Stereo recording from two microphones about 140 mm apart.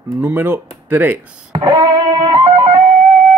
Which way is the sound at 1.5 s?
30° right (ahead or behind).